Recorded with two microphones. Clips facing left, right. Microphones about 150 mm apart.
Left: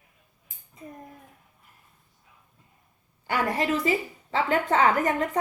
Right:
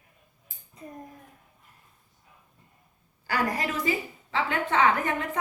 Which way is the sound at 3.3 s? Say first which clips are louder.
Left 3 dB; 30° left (ahead or behind).